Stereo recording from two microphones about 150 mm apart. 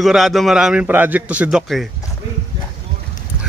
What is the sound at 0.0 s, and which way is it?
A man's voice, centre (ahead or behind).